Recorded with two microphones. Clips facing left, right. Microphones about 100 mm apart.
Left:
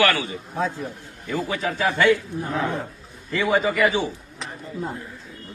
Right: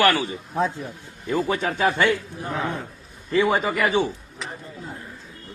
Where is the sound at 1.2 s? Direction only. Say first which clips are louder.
Right 2 dB; 35° right (ahead or behind).